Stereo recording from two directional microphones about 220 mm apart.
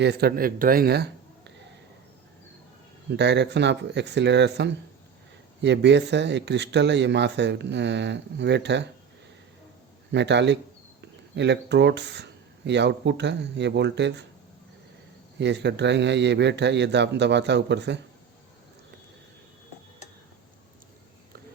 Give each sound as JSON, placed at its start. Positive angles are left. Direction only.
{"t": 0.0, "sound": "speech", "side_deg": -50}
{"t": 3.1, "sound": "speech", "side_deg": -50}
{"t": 10.1, "sound": "speech", "side_deg": -50}
{"t": 15.4, "sound": "speech", "side_deg": -50}